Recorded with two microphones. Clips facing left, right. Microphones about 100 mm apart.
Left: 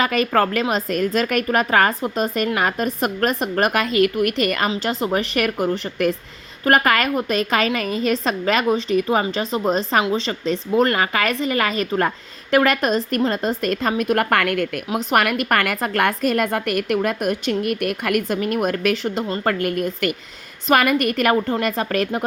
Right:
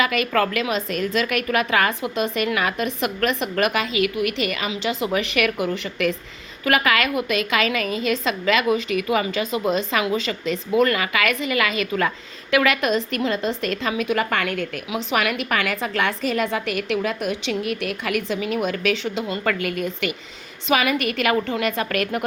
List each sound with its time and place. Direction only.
0.0 s a woman's voice: 40° left (ahead or behind)
4.7 s a woman's voice: 40° left (ahead or behind)